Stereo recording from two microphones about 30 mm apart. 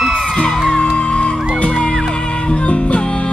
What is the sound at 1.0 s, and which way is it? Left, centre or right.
Music, left.